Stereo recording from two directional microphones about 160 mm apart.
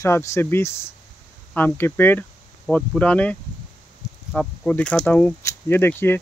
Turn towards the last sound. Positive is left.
turn(degrees=15)  # may be behind; listen again after turning